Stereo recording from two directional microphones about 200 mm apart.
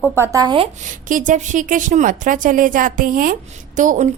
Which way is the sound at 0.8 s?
40° right (ahead or behind).